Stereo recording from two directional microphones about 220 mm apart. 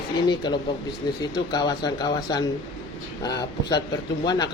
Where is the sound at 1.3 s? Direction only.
20° left (ahead or behind).